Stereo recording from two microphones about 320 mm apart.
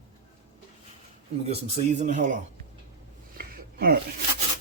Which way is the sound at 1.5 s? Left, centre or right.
Centre.